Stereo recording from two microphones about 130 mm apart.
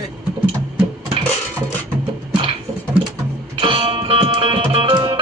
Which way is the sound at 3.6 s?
45° right (ahead or behind).